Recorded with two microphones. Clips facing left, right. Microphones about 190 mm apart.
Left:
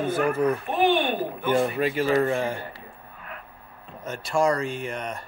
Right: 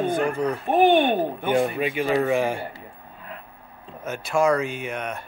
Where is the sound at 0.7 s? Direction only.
50° right (ahead or behind).